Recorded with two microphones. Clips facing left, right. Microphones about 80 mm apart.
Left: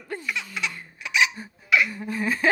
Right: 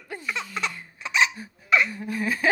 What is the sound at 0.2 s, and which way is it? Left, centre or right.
Laughter, right.